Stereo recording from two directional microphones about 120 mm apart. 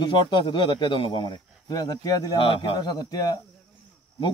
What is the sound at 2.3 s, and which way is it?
Speech, 45° left (ahead or behind).